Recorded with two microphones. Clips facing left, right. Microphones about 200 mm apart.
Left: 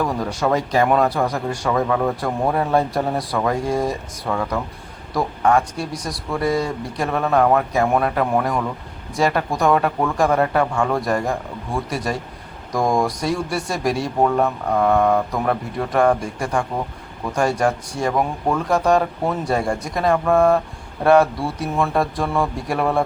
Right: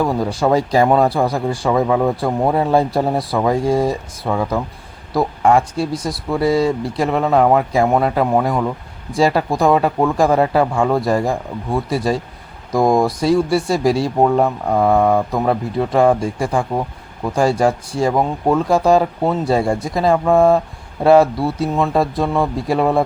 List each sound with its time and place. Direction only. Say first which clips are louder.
0.0 s a man's voice: right 4 dB; 30° right (ahead or behind)